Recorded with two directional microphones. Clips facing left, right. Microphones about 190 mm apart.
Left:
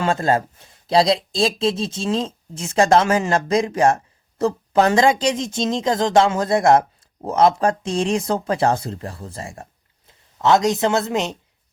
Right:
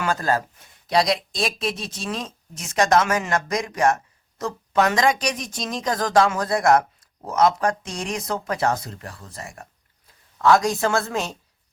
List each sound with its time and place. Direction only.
0.0 s speech: 25° left (ahead or behind)